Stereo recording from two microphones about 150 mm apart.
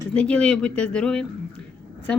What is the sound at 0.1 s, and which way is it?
A woman's voice, 5° left (ahead or behind).